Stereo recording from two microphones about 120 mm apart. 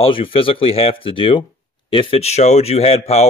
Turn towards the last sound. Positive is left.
turn(degrees=60)  # may be behind; listen again after turning